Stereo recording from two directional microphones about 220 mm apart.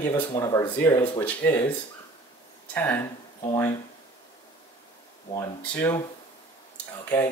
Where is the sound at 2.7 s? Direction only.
10° left (ahead or behind).